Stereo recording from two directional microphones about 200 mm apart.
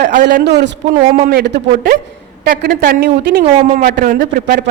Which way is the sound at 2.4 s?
45° right (ahead or behind).